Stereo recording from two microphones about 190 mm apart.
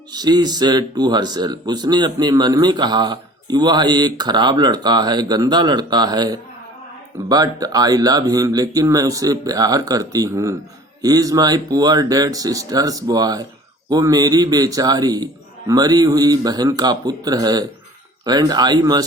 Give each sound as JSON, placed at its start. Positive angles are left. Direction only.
{"t": 0.1, "sound": "speech", "side_deg": -20}